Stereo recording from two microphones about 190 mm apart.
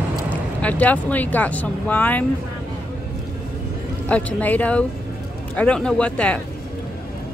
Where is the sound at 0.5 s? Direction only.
10° left (ahead or behind).